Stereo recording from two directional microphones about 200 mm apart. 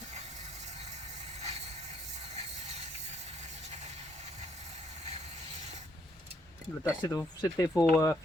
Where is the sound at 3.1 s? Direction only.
35° right (ahead or behind).